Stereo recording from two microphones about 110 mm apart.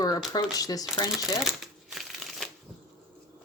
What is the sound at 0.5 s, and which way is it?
Speech, 35° left (ahead or behind).